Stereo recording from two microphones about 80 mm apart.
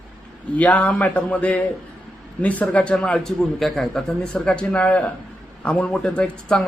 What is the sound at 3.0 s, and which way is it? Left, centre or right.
Speech, centre.